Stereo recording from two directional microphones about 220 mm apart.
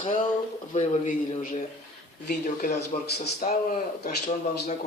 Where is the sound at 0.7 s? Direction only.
35° left (ahead or behind).